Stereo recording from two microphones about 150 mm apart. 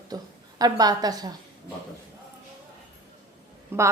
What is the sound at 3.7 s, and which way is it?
Speech, 15° right (ahead or behind).